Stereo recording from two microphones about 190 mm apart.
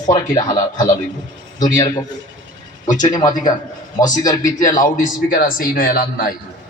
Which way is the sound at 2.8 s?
40° left (ahead or behind).